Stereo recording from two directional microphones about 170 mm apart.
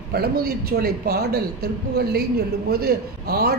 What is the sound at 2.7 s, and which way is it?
Speech, 65° right (ahead or behind).